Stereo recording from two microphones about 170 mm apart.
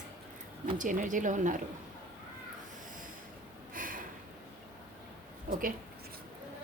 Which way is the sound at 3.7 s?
55° right (ahead or behind).